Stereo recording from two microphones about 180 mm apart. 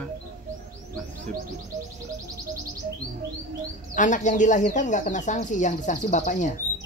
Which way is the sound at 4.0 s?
45° left (ahead or behind).